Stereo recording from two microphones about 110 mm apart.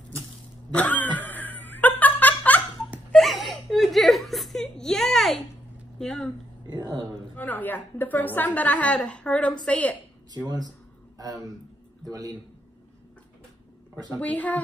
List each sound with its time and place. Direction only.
0.7 s laughter: 15° left (ahead or behind)
3.1 s whimper: centre (ahead or behind)
5.9 s a sound: 5° left (ahead or behind)
6.7 s a sound: 45° right (ahead or behind)
7.3 s a woman's voice: 15° left (ahead or behind)
10.3 s speech: 40° right (ahead or behind)
14.1 s a woman's voice: 10° left (ahead or behind)